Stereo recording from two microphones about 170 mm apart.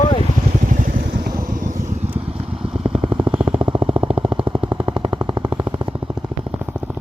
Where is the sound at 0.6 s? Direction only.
50° right (ahead or behind); by 6.1 s 30° right (ahead or behind).